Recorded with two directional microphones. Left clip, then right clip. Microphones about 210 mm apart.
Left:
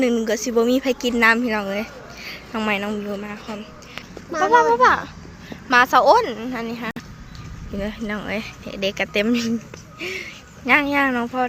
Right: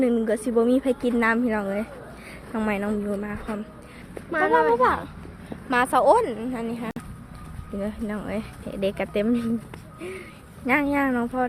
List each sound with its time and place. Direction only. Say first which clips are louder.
0.0 s speech: left 3 dB; 10° right (ahead or behind)
4.3 s a child's voice: left 2 dB; 30° left (ahead or behind)
4.7 s speech: left 5 dB; centre (ahead or behind)
9.2 s speech: left 3 dB; centre (ahead or behind)